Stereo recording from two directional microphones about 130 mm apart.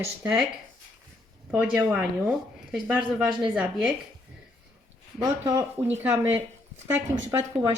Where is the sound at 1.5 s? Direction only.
10° right (ahead or behind).